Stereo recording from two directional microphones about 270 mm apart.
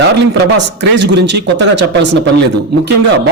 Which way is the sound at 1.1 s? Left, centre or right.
Right.